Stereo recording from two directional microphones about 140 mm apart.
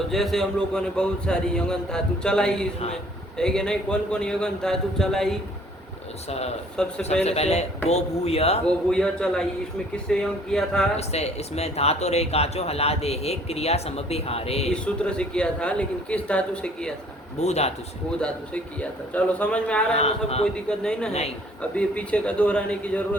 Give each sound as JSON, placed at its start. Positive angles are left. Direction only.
{"t": 0.1, "sound": "a man's voice", "side_deg": 0}
{"t": 6.2, "sound": "speech", "side_deg": 50}
{"t": 6.8, "sound": "a man's voice", "side_deg": 5}
{"t": 7.3, "sound": "speech", "side_deg": 50}
{"t": 8.6, "sound": "a man's voice", "side_deg": 5}
{"t": 10.9, "sound": "speech", "side_deg": 50}
{"t": 14.7, "sound": "speech", "side_deg": 5}
{"t": 17.4, "sound": "speech", "side_deg": 50}
{"t": 18.2, "sound": "speech", "side_deg": 10}
{"t": 19.9, "sound": "speech", "side_deg": 50}
{"t": 20.4, "sound": "a man's voice", "side_deg": 5}